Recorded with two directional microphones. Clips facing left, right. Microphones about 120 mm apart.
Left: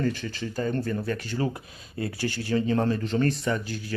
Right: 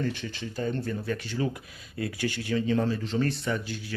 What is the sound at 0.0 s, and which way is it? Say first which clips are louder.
Speech: left 3 dB; 40° left (ahead or behind).